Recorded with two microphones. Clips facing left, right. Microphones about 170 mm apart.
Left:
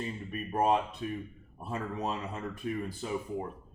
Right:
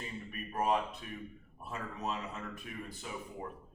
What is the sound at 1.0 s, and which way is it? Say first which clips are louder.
Speech: left 8 dB; 35° left (ahead or behind).